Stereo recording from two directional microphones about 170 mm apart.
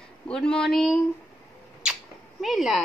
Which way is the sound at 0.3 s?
5° left (ahead or behind).